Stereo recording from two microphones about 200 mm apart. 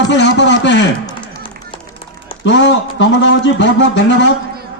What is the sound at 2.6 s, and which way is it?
Speech, 65° left (ahead or behind).